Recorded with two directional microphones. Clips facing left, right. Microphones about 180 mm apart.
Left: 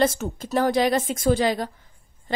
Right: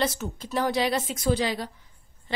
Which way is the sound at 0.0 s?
50° left (ahead or behind).